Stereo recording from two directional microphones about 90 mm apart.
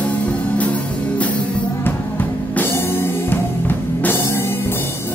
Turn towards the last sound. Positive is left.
turn(degrees=25)  # may be behind; listen again after turning